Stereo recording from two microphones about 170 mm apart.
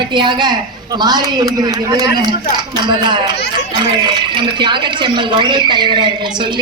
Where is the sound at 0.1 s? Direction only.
25° right (ahead or behind).